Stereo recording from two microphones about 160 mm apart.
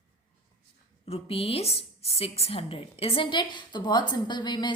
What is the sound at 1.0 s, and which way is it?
A woman's voice, 35° left (ahead or behind).